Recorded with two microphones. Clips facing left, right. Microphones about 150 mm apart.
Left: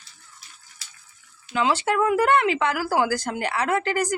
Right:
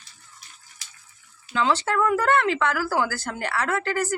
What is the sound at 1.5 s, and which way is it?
Speech, 10° left (ahead or behind).